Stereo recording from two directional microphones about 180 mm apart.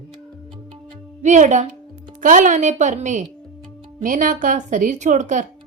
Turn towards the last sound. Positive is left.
turn(degrees=-45)  # may be behind; listen again after turning